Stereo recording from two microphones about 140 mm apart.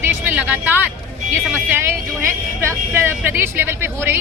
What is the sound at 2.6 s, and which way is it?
Speech, 20° right (ahead or behind).